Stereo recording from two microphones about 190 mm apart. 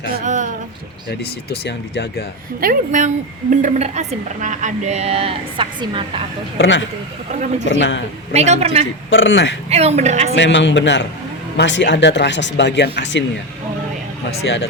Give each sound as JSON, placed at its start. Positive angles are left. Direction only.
{"t": 0.3, "sound": "a sound", "side_deg": -40}
{"t": 1.5, "sound": "speech", "side_deg": 60}
{"t": 2.6, "sound": "a woman's voice", "side_deg": -45}
{"t": 6.6, "sound": "speech", "side_deg": 75}
{"t": 8.3, "sound": "a woman's voice", "side_deg": -35}
{"t": 9.0, "sound": "speech", "side_deg": 80}
{"t": 9.6, "sound": "a woman's voice", "side_deg": -35}
{"t": 10.3, "sound": "speech", "side_deg": 70}